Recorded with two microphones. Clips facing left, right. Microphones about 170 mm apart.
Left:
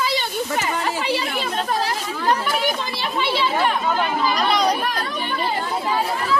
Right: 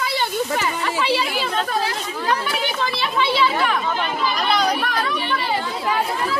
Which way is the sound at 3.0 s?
40° left (ahead or behind).